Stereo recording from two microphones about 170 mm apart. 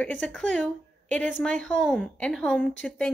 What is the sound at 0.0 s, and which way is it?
A woman's voice, 10° left (ahead or behind).